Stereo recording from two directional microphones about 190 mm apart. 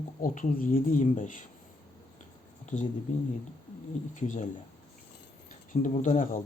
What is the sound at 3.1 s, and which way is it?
Speech, 40° left (ahead or behind).